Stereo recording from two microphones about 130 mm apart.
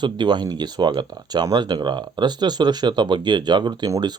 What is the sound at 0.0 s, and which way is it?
Speech, 35° right (ahead or behind).